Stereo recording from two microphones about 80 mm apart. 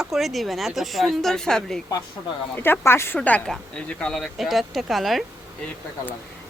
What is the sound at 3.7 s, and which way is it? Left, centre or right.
Speech, centre.